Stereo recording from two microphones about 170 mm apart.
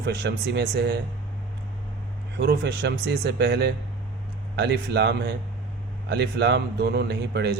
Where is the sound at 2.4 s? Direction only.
70° right (ahead or behind).